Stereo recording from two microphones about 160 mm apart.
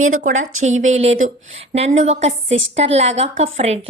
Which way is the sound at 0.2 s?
50° right (ahead or behind).